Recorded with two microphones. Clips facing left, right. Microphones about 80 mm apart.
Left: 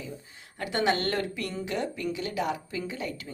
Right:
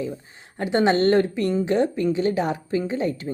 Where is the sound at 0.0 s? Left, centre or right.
Right.